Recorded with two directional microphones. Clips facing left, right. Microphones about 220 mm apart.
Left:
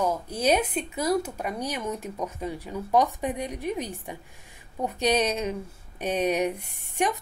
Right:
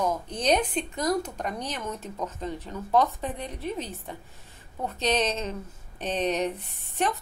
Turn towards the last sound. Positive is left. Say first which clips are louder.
# left 1 dB
turn(degrees=10)  # may be behind; listen again after turning